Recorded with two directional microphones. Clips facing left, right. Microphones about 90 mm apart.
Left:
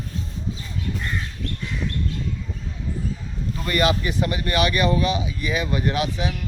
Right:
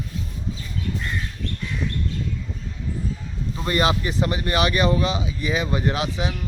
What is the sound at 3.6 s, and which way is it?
Speech, 25° right (ahead or behind).